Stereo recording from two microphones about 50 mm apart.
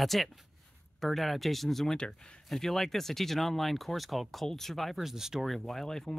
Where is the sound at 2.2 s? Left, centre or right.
Centre.